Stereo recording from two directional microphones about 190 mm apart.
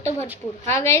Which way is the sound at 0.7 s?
15° left (ahead or behind).